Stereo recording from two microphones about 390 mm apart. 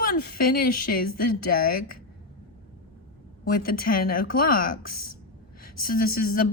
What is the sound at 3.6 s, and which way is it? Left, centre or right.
Speech, left.